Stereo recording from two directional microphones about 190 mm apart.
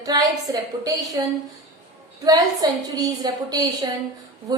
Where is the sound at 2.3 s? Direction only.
20° right (ahead or behind).